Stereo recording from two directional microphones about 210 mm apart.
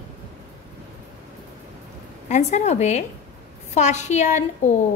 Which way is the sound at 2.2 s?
35° left (ahead or behind).